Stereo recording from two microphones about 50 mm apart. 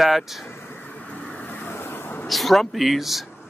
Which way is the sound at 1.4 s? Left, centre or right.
Left.